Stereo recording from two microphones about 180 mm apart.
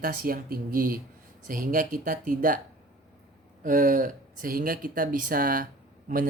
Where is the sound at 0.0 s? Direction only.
55° right (ahead or behind).